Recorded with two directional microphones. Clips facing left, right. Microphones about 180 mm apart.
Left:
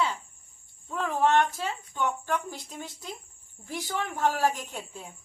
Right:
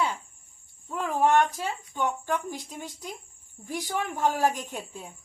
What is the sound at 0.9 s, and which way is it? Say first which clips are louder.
Speech: right 1 dB; 15° right (ahead or behind).